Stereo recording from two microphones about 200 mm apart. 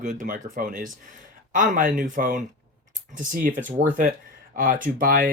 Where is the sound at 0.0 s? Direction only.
40° right (ahead or behind).